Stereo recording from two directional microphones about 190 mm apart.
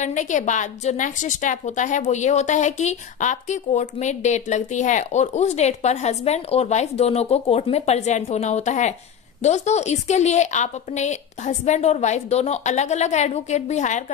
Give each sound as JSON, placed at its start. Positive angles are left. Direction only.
{"t": 0.0, "sound": "a woman's voice", "side_deg": 40}